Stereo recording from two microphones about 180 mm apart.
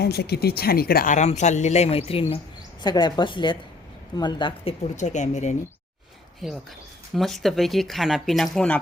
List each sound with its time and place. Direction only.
0.0 s a woman's voice: 65° left (ahead or behind); by 5.5 s 40° left (ahead or behind)
7.1 s speech: centre (ahead or behind)